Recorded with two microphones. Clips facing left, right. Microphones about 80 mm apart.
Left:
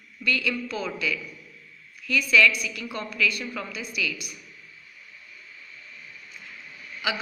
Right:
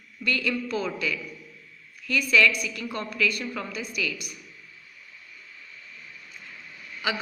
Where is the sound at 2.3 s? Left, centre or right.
Right.